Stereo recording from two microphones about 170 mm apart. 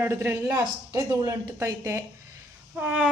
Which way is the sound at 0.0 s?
15° right (ahead or behind).